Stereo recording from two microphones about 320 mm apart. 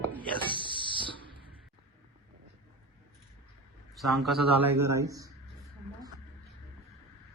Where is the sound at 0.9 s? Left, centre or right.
Centre.